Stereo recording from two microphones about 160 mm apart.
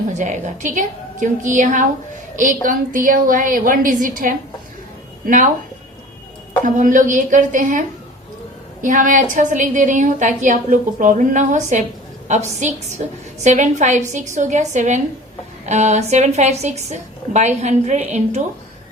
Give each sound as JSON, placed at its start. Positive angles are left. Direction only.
{"t": 0.1, "sound": "a woman's voice", "side_deg": -50}
{"t": 6.7, "sound": "a woman's voice", "side_deg": -55}